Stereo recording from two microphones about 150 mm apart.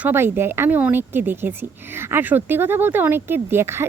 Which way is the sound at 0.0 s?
15° right (ahead or behind).